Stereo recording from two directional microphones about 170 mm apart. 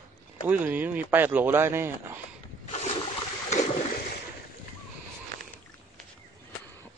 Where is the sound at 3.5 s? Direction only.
45° left (ahead or behind).